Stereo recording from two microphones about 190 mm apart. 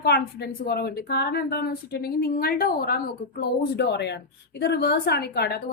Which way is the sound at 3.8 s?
65° left (ahead or behind).